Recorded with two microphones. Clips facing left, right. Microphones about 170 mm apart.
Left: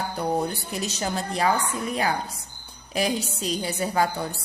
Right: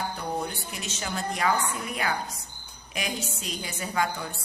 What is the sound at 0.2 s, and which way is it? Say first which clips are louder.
Speech: left 6 dB; 35° left (ahead or behind).